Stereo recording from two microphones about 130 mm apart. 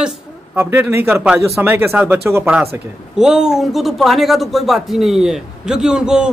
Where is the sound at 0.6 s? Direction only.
20° right (ahead or behind).